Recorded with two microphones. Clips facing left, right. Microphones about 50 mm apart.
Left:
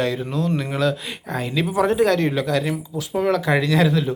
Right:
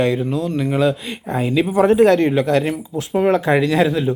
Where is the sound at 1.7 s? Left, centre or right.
Right.